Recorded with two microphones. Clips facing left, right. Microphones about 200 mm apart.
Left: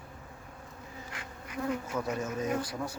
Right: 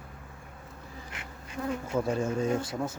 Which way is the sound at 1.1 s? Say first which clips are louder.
Left 1 dB; 25° right (ahead or behind).